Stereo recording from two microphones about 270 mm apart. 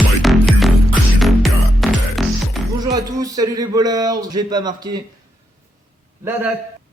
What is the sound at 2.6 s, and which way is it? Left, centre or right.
Speech, centre.